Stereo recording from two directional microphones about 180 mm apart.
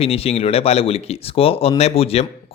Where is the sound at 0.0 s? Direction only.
35° left (ahead or behind).